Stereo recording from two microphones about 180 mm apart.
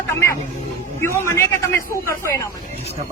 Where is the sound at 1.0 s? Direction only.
15° left (ahead or behind).